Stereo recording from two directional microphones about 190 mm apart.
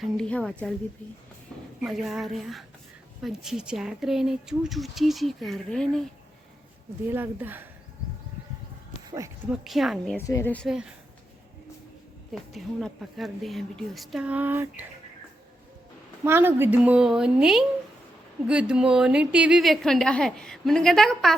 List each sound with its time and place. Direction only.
0.0 s a woman's voice: 5° left (ahead or behind)
1.8 s a woman's voice: centre (ahead or behind)
7.1 s a woman's voice: 10° right (ahead or behind)
9.0 s a sound: 15° right (ahead or behind)
9.5 s a woman's voice: centre (ahead or behind)
10.2 s speech: 15° left (ahead or behind)
10.7 s a woman's voice: 5° right (ahead or behind)
12.3 s a woman's voice: centre (ahead or behind)
16.2 s a woman's voice: 10° right (ahead or behind)